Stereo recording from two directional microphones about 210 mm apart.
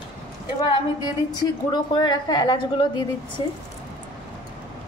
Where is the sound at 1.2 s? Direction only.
20° left (ahead or behind).